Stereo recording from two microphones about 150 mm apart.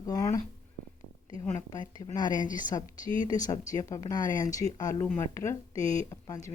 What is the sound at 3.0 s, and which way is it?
Speech, 35° right (ahead or behind).